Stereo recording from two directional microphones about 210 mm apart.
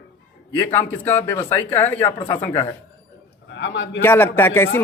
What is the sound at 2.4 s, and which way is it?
Speech, 10° left (ahead or behind).